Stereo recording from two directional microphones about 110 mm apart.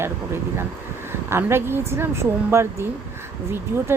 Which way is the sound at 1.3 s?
20° right (ahead or behind).